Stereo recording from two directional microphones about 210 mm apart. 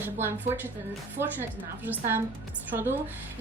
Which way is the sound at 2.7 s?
10° right (ahead or behind).